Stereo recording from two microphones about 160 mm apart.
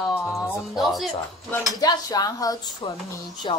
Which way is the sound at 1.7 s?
25° left (ahead or behind).